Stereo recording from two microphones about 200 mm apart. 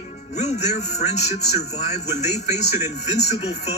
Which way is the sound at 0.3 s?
35° left (ahead or behind).